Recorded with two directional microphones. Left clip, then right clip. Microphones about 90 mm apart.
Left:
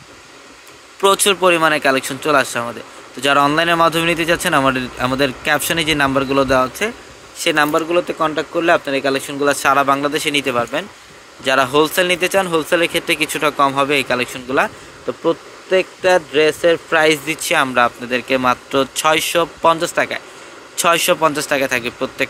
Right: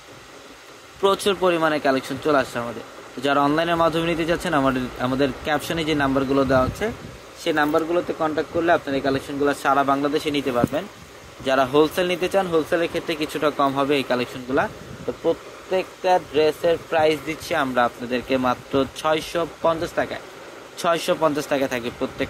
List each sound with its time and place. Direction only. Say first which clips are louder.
1.0 s speech: left 6 dB; 25° left (ahead or behind)
11.4 s speech: left 4 dB; 15° left (ahead or behind)
12.4 s speech: left 5 dB; 40° left (ahead or behind)
13.0 s speech: left 6 dB; 30° left (ahead or behind)
15.8 s speech: left 4 dB; 90° left
18.0 s speech: left 6 dB; 15° left (ahead or behind)
19.1 s speech: left 8 dB; 50° left (ahead or behind)
21.2 s speech: left 5 dB; 15° left (ahead or behind)